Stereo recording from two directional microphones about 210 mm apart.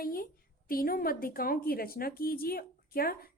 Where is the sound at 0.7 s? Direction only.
45° left (ahead or behind).